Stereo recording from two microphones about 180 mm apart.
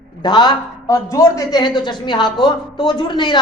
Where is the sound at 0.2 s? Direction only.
25° left (ahead or behind).